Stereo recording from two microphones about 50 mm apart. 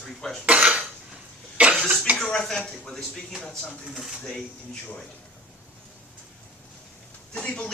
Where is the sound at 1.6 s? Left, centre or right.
Right.